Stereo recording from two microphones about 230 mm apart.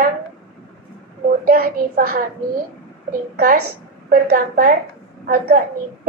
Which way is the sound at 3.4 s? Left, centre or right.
Right.